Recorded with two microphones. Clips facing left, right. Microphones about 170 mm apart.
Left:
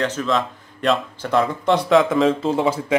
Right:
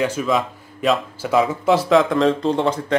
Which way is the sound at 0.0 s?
10° right (ahead or behind).